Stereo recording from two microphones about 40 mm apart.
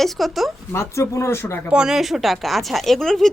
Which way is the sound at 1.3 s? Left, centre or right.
Left.